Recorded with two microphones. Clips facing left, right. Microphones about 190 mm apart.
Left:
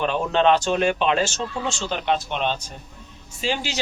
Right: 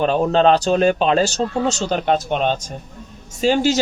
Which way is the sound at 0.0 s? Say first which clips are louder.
Right 5 dB; 40° right (ahead or behind).